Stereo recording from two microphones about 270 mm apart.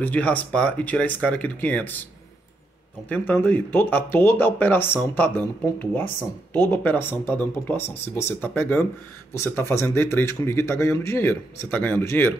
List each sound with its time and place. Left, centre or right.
0.0 s speech: centre
3.1 s speech: centre